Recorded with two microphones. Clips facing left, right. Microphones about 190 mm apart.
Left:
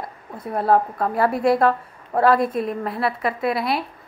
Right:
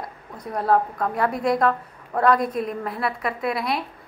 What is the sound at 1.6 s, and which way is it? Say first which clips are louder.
Speech: left 3 dB; 30° left (ahead or behind).